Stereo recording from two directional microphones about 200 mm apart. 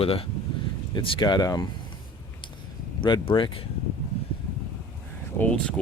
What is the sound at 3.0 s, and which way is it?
Speech, 25° left (ahead or behind).